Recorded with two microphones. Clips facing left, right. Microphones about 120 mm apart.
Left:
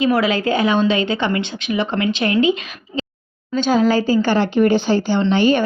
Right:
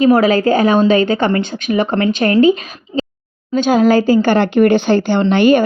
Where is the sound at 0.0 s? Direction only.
40° right (ahead or behind).